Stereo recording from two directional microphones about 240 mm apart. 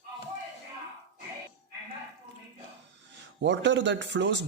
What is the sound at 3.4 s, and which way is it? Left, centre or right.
Speech, right.